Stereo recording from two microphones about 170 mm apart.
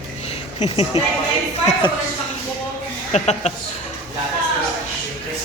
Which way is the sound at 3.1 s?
40° left (ahead or behind).